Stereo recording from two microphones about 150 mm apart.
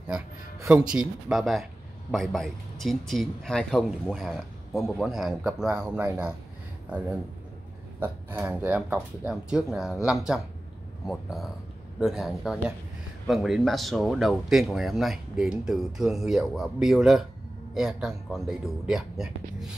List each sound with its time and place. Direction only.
0.7 s a man's voice: 5° right (ahead or behind)
8.0 s a man's voice: 15° right (ahead or behind)